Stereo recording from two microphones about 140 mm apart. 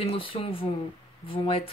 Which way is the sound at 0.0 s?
40° left (ahead or behind).